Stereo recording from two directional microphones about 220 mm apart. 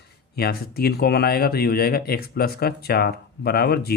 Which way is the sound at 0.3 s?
45° left (ahead or behind).